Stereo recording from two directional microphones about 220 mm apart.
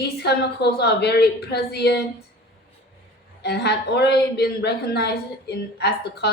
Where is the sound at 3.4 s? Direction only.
50° left (ahead or behind).